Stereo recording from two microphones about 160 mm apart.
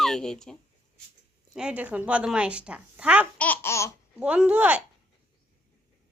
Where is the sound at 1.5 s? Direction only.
5° right (ahead or behind).